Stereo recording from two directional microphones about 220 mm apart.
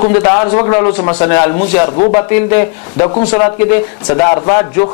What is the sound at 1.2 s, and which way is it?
Speech, 20° left (ahead or behind).